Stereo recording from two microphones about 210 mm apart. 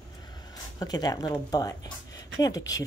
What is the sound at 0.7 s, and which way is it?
A woman's voice, 20° left (ahead or behind).